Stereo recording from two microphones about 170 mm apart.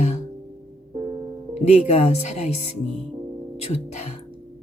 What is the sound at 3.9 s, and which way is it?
Speech, 40° left (ahead or behind).